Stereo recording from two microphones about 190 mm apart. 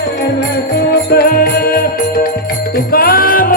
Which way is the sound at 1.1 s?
55° left (ahead or behind).